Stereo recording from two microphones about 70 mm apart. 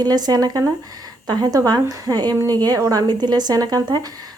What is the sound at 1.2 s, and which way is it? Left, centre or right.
A woman's voice, right.